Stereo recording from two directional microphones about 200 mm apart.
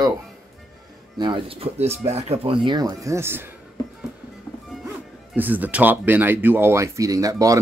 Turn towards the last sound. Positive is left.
turn(degrees=-15)  # may be behind; listen again after turning